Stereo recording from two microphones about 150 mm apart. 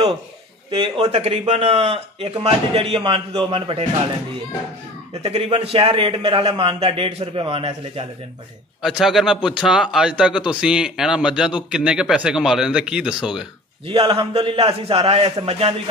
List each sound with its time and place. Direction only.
0.7 s speech: 35° right (ahead or behind)
5.2 s speech: 40° right (ahead or behind)
8.8 s speech: 5° right (ahead or behind)
13.8 s speech: 35° right (ahead or behind)